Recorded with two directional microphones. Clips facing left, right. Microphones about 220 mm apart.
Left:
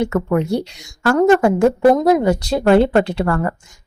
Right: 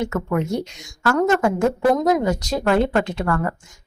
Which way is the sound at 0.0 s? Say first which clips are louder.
Left 5 dB; 35° left (ahead or behind).